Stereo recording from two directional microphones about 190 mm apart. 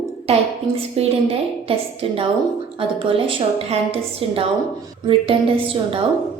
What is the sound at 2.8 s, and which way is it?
A woman's voice, 30° right (ahead or behind).